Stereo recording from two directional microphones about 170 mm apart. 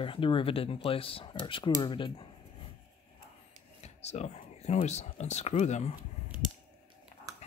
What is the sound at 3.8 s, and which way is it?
Speech, 40° left (ahead or behind).